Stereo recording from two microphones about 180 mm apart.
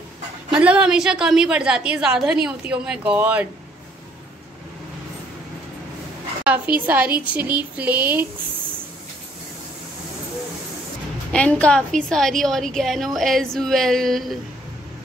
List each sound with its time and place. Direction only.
0.5 s a woman's voice: 5° right (ahead or behind)
6.4 s a woman's voice: 10° right (ahead or behind)
11.3 s a woman's voice: 5° left (ahead or behind)